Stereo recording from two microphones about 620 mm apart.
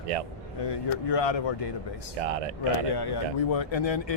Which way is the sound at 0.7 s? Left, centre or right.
Left.